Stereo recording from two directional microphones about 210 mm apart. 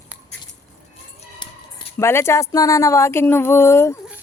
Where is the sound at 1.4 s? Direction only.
20° left (ahead or behind).